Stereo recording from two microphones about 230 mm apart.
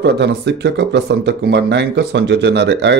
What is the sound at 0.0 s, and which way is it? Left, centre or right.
Speech, right.